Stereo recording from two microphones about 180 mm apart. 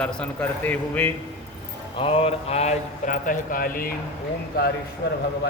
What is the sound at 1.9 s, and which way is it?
Mantra, 30° left (ahead or behind).